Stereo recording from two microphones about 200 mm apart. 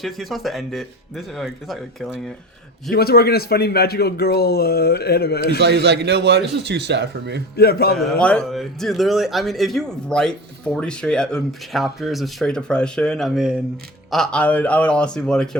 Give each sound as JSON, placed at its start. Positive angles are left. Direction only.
{"t": 0.0, "sound": "speech", "side_deg": 0}
{"t": 2.9, "sound": "a man's voice", "side_deg": 50}
{"t": 5.5, "sound": "speech", "side_deg": -55}
{"t": 7.5, "sound": "a man's voice", "side_deg": 50}
{"t": 7.9, "sound": "speech", "side_deg": 5}